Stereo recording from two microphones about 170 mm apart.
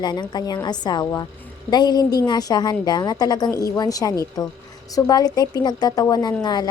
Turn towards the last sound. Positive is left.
turn(degrees=25)  # may be behind; listen again after turning